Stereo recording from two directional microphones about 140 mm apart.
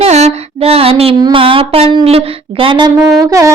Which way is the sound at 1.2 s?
35° right (ahead or behind).